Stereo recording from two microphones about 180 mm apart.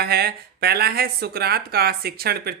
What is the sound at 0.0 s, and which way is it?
Speech, 60° right (ahead or behind).